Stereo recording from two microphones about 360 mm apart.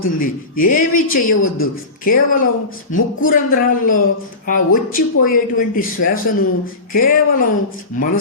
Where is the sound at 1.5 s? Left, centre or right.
Left.